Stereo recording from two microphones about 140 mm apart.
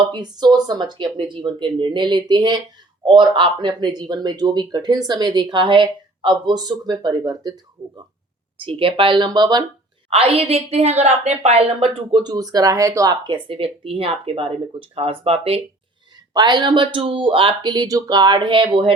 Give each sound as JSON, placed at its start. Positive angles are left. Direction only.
{"t": 0.0, "sound": "speech", "side_deg": -30}
{"t": 10.1, "sound": "a woman's voice", "side_deg": -45}
{"t": 12.2, "sound": "speech", "side_deg": -30}
{"t": 16.1, "sound": "speech", "side_deg": -30}